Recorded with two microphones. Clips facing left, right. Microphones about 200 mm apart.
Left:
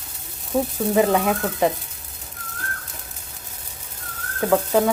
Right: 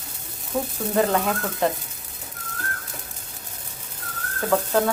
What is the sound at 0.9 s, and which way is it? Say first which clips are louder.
Speech: left 3 dB; 10° left (ahead or behind).